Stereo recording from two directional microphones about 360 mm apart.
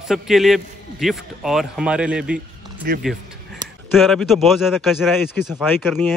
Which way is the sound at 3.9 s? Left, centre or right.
Centre.